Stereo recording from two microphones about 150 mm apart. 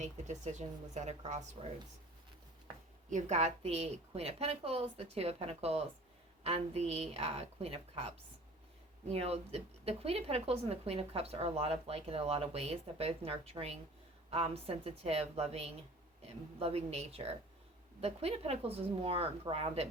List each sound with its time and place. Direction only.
0.0 s speech: 50° right (ahead or behind)
1.6 s speech: 45° right (ahead or behind)
3.1 s speech: 55° right (ahead or behind)